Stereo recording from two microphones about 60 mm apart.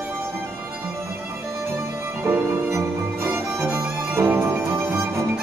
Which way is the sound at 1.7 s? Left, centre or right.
Right.